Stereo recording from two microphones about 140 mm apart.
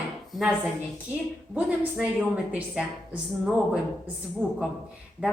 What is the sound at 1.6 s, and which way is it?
A woman's voice, 10° right (ahead or behind).